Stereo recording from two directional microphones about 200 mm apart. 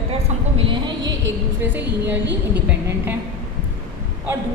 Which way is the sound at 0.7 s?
20° right (ahead or behind).